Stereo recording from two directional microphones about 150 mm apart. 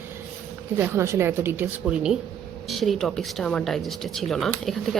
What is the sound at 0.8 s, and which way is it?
A woman's voice, 20° right (ahead or behind).